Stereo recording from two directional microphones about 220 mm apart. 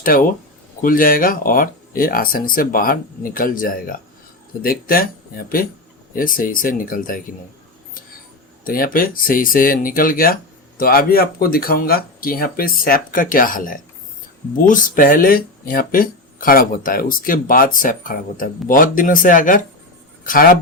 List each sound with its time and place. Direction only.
0.0 s speech: 40° left (ahead or behind)
8.6 s speech: 40° left (ahead or behind)